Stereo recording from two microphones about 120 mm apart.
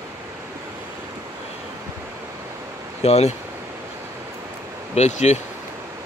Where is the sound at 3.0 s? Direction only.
65° left (ahead or behind).